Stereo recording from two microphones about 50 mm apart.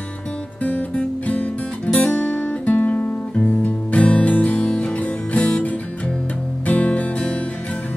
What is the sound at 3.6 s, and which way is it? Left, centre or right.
Music, left.